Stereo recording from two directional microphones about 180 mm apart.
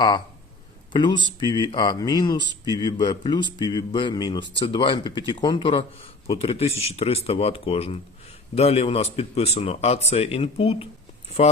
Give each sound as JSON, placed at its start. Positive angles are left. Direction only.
{"t": 0.9, "sound": "speech", "side_deg": 25}